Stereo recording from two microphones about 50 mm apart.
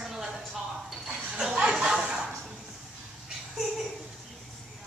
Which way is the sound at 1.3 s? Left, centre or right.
Centre.